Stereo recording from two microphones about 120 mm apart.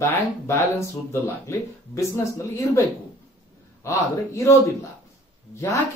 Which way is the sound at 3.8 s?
25° left (ahead or behind).